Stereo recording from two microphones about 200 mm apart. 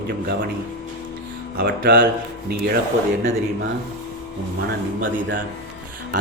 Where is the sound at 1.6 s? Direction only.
50° right (ahead or behind).